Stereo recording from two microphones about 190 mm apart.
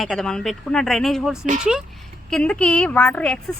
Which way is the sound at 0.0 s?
Centre (ahead or behind).